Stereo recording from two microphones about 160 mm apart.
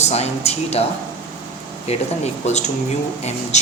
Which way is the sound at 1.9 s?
45° left (ahead or behind).